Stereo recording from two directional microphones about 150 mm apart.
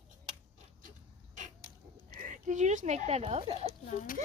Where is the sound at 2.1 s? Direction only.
55° right (ahead or behind).